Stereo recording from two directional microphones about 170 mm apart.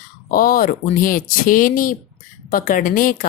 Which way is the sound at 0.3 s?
55° left (ahead or behind).